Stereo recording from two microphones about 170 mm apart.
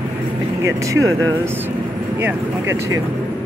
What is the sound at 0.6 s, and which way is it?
Speech, 20° right (ahead or behind).